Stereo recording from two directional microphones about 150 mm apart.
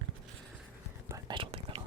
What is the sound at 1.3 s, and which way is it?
Whispering, 35° right (ahead or behind).